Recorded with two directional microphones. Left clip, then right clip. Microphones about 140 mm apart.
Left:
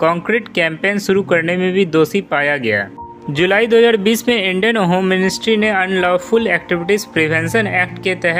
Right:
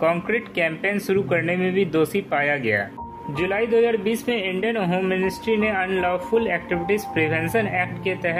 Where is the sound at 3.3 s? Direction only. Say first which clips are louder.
Left 8 dB; 55° left (ahead or behind).